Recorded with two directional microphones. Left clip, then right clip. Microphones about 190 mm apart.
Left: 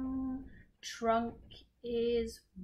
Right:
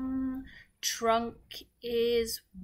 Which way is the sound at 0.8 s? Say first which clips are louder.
Right 4 dB; 15° right (ahead or behind).